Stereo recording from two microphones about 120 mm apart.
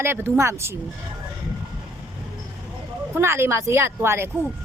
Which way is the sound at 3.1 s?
20° right (ahead or behind).